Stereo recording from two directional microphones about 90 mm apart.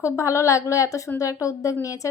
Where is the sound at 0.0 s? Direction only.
30° left (ahead or behind).